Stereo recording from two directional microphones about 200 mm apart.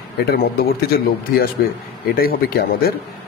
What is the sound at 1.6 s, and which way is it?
A man's voice, 55° left (ahead or behind).